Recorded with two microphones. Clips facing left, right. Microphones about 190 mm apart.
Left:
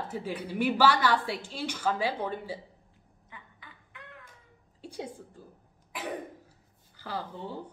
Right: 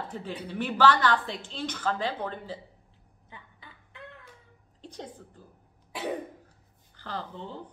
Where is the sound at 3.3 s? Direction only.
30° right (ahead or behind).